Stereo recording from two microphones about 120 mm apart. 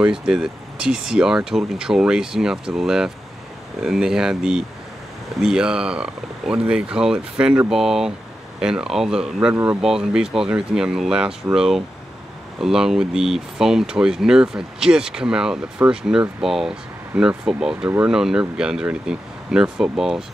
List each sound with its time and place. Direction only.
0.0 s speech: 5° right (ahead or behind)
17.8 s speech: 15° right (ahead or behind)
18.1 s speech: 5° right (ahead or behind)